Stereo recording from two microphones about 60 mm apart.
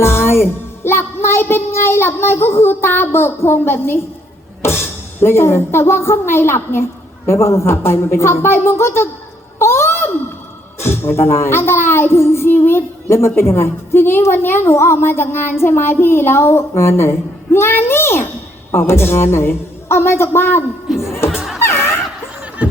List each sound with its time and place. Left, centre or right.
0.0 s speech: left
5.2 s speech: left
9.6 s a sound: left
10.8 s speech: left
20.8 s speech: centre
21.2 s music: centre
21.6 s music: left